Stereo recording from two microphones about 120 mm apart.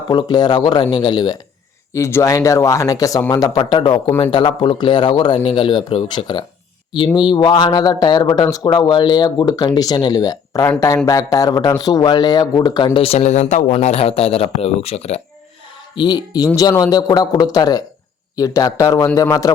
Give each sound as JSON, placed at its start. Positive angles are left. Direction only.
{"t": 0.1, "sound": "a man's voice", "side_deg": 35}
{"t": 1.9, "sound": "a man's voice", "side_deg": 20}
{"t": 13.7, "sound": "speech", "side_deg": 60}
{"t": 16.0, "sound": "a man's voice", "side_deg": 35}